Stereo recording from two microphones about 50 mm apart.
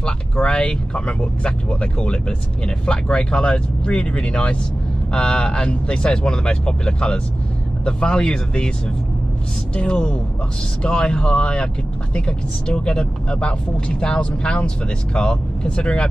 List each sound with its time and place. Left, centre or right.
0.0 s speech: centre
9.8 s speech: left